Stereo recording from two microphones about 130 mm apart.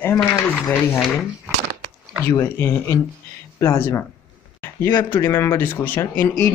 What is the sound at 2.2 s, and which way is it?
Speech, 20° left (ahead or behind).